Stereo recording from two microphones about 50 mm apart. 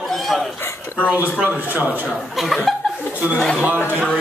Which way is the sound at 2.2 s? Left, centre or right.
Centre.